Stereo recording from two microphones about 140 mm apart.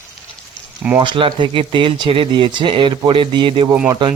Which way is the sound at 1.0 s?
35° right (ahead or behind).